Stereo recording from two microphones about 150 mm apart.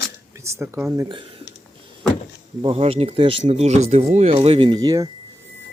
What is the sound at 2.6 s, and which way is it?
Speech, 40° right (ahead or behind).